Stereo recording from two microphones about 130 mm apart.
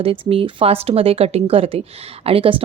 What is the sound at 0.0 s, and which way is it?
Speech, 45° right (ahead or behind).